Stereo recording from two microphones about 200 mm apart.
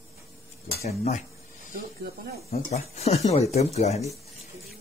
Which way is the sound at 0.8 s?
35° left (ahead or behind).